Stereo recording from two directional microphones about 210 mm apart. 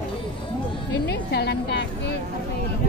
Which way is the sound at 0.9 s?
55° left (ahead or behind).